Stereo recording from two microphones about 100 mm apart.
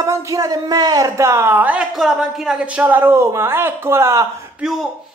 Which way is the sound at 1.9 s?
5° right (ahead or behind).